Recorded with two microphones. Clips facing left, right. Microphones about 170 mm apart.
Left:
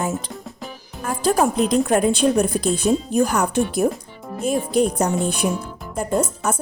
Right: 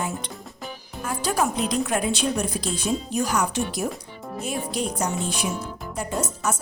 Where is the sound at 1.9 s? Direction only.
45° left (ahead or behind).